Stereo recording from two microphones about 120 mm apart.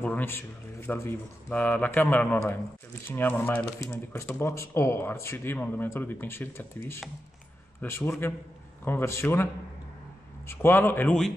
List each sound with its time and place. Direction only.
0.0 s a man's voice: 15° left (ahead or behind)
7.8 s speech: 20° left (ahead or behind)
10.5 s speech: 20° left (ahead or behind)